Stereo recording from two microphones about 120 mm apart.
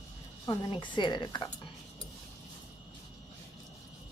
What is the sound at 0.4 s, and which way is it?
Speech, 40° left (ahead or behind).